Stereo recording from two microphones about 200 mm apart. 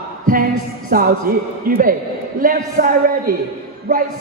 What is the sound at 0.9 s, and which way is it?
A man's voice, 45° right (ahead or behind).